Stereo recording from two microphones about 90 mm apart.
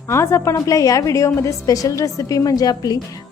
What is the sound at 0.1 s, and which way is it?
A woman's voice, 30° left (ahead or behind).